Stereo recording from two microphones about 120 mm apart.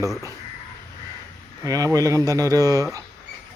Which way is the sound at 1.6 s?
30° right (ahead or behind).